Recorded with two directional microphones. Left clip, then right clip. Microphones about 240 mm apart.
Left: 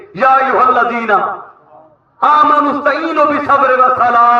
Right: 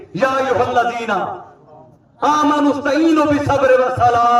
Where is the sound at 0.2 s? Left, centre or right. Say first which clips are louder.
Left 6 dB; right.